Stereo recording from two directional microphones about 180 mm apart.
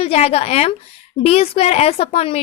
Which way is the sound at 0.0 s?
35° left (ahead or behind).